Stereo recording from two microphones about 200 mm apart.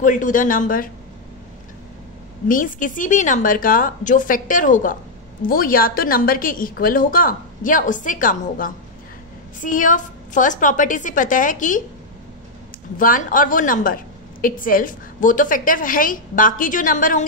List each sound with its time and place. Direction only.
0.0 s a woman's voice: 40° left (ahead or behind)
2.4 s a woman's voice: 40° left (ahead or behind)
12.9 s a woman's voice: 45° left (ahead or behind)